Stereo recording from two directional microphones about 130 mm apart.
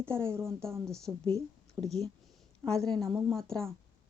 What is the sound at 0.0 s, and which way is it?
Speech, 20° right (ahead or behind).